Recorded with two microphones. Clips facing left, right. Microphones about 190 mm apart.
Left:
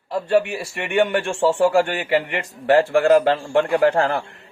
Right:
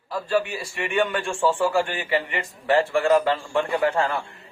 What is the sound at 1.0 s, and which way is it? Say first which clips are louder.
A man's voice: left 4 dB; 70° left (ahead or behind).